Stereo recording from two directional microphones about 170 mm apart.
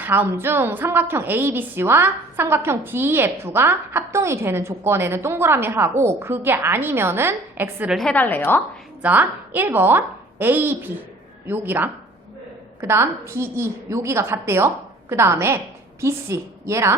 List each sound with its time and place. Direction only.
0.0 s a woman's voice: 10° right (ahead or behind); by 8.6 s 10° left (ahead or behind)
9.0 s a woman's voice: 10° right (ahead or behind)